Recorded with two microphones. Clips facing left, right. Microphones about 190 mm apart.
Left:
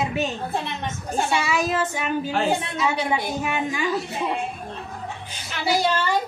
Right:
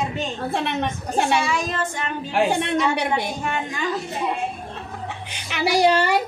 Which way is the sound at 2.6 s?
70° right (ahead or behind).